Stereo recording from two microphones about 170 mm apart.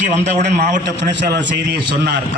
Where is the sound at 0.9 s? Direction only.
90° right.